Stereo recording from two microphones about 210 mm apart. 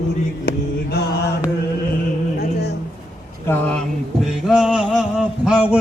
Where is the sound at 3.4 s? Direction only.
10° left (ahead or behind).